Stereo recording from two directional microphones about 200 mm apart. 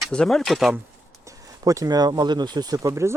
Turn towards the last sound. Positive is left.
turn(degrees=-15)  # may be behind; listen again after turning